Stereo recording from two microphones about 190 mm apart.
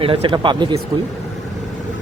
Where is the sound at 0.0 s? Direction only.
30° right (ahead or behind).